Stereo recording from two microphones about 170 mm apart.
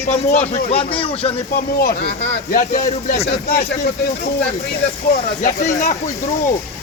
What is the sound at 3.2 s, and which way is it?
Speech, 70° left (ahead or behind).